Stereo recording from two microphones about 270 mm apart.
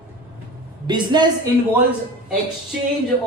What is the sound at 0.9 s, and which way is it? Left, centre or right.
Speech, centre.